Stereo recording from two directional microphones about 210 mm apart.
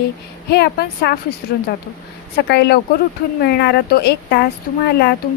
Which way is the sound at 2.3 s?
50° left (ahead or behind).